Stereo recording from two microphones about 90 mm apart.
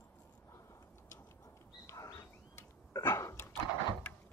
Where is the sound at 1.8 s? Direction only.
40° left (ahead or behind).